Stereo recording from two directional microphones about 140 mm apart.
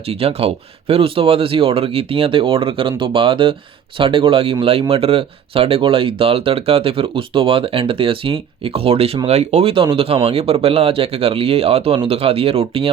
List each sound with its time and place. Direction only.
0.1 s speech: 45° right (ahead or behind)